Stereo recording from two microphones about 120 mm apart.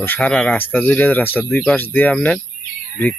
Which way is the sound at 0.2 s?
5° left (ahead or behind).